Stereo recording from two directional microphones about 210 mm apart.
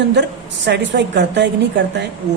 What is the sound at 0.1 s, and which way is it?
Speech, 55° right (ahead or behind).